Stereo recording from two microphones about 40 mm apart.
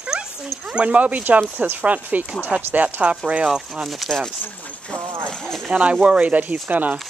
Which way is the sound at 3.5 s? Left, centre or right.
Centre.